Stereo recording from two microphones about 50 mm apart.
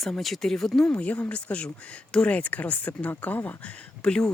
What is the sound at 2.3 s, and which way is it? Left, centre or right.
Speech, left.